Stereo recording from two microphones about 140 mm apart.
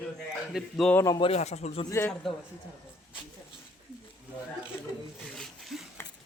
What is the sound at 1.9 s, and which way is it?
Speech, 20° left (ahead or behind).